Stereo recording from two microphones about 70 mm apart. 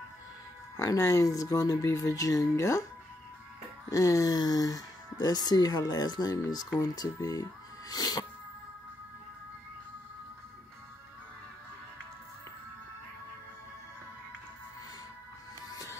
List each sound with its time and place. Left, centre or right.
0.7 s speech: left
3.9 s speech: left
6.8 s speech: left
7.9 s music: left